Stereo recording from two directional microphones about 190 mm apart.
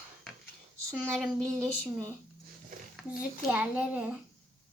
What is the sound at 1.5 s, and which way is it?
Speech, 15° right (ahead or behind).